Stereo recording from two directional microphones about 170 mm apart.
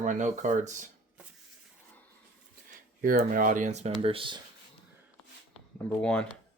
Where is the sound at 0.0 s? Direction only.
45° right (ahead or behind).